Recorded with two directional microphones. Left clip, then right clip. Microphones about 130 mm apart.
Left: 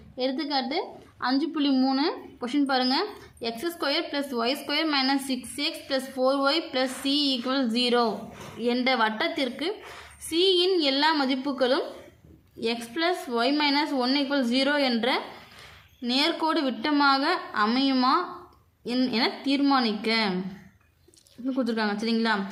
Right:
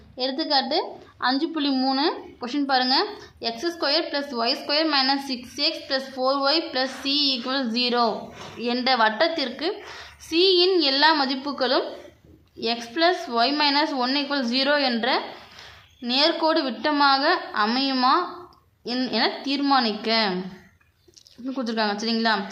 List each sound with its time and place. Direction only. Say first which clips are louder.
0.2 s a woman's voice: right 4 dB; 35° left (ahead or behind)
21.4 s a woman's voice: right 2 dB; 30° left (ahead or behind)